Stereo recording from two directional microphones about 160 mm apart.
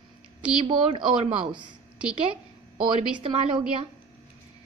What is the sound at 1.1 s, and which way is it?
Speech, 35° right (ahead or behind).